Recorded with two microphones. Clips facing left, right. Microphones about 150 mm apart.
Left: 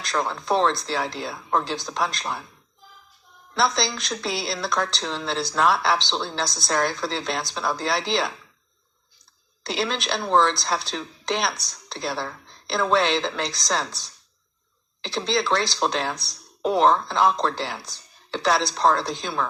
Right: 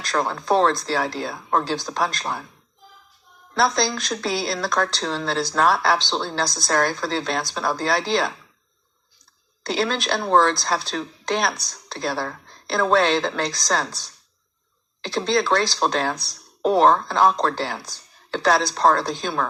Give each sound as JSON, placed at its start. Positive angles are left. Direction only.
{"t": 0.0, "sound": "speech", "side_deg": -50}
{"t": 3.5, "sound": "speech", "side_deg": -50}
{"t": 9.6, "sound": "a woman's voice", "side_deg": -50}
{"t": 15.0, "sound": "speech", "side_deg": -50}